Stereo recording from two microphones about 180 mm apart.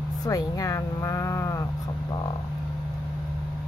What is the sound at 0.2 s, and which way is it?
Speech, 20° left (ahead or behind).